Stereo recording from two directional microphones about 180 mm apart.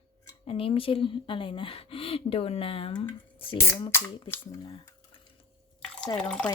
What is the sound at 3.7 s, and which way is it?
Speech, 20° left (ahead or behind).